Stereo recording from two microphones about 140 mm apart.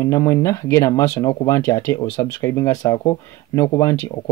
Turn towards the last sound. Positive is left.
turn(degrees=20)  # may be behind; listen again after turning